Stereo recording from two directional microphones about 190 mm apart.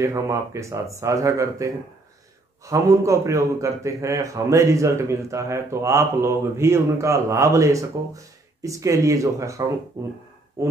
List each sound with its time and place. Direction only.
0.0 s a man's voice: 15° right (ahead or behind)